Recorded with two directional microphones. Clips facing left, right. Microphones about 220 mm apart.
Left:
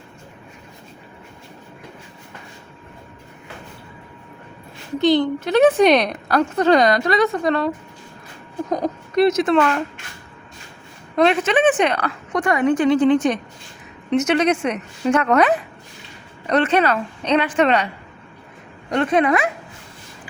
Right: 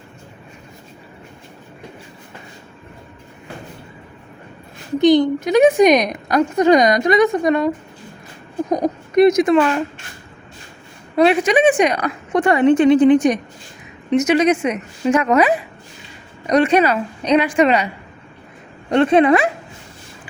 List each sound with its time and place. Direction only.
4.9 s a woman's voice: 15° right (ahead or behind)
8.7 s a sound: 20° right (ahead or behind)
11.2 s a woman's voice: 10° right (ahead or behind)
12.3 s a woman's voice: 25° right (ahead or behind); by 17.8 s 10° right (ahead or behind)
18.9 s a woman's voice: 30° right (ahead or behind)